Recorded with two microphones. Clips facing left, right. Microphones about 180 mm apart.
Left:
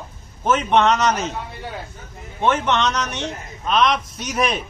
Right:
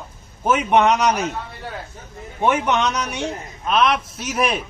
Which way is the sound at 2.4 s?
15° right (ahead or behind).